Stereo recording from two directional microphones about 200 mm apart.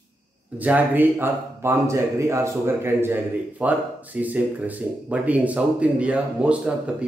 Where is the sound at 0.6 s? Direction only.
10° right (ahead or behind).